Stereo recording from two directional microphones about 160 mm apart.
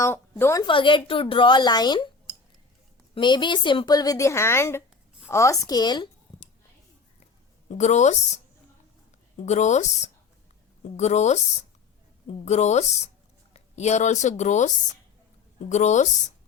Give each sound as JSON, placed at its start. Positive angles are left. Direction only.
{"t": 0.0, "sound": "a woman's voice", "side_deg": 15}
{"t": 0.7, "sound": "a woman's voice", "side_deg": 30}
{"t": 3.2, "sound": "a woman's voice", "side_deg": 30}
{"t": 7.7, "sound": "speech", "side_deg": 45}
{"t": 9.4, "sound": "a woman's voice", "side_deg": 45}
{"t": 15.7, "sound": "speech", "side_deg": 45}